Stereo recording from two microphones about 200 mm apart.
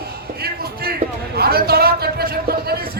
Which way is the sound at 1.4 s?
50° right (ahead or behind).